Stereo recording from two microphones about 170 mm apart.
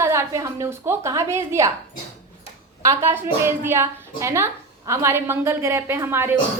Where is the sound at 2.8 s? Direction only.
15° right (ahead or behind).